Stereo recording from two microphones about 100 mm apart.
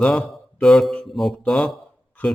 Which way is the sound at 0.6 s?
Centre (ahead or behind).